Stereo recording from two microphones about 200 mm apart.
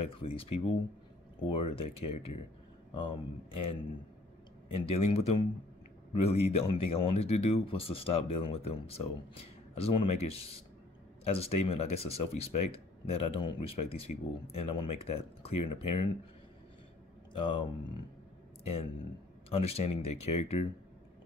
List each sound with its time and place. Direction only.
0.1 s speech: 30° left (ahead or behind)
4.7 s speech: 30° left (ahead or behind)
17.3 s speech: 25° left (ahead or behind)